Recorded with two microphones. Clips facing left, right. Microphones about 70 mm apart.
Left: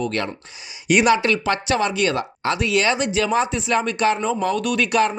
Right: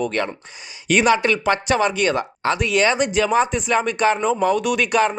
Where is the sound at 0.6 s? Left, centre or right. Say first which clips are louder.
Even; centre.